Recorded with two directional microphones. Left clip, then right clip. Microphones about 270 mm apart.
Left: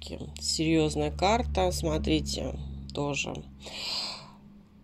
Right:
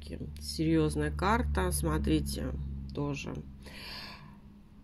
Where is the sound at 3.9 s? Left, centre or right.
Centre.